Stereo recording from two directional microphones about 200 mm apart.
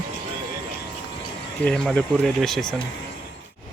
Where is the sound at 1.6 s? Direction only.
5° left (ahead or behind).